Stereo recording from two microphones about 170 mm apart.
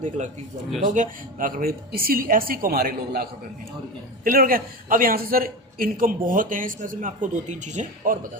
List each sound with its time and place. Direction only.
0.9 s a woman's voice: 50° right (ahead or behind)